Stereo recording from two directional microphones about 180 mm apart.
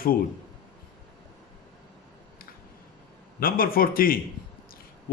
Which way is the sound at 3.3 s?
55° left (ahead or behind).